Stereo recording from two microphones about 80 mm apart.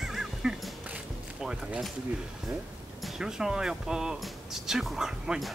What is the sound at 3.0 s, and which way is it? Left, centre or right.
Speech, centre.